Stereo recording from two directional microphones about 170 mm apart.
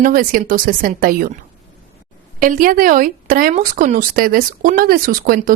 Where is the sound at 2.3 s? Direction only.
55° right (ahead or behind).